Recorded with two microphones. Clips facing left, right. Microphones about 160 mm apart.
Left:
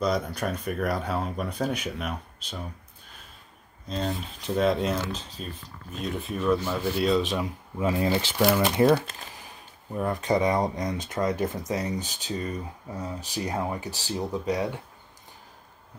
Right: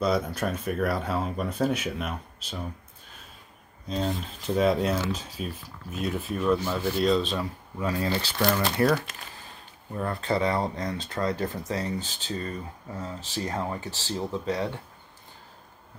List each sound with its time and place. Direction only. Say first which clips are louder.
0.0 s speech: right 1 dB; 5° right (ahead or behind)
3.9 s speech: right 1 dB; centre (ahead or behind)
7.2 s speech: left 2 dB; 15° left (ahead or behind)
9.9 s speech: left 2 dB; 15° left (ahead or behind)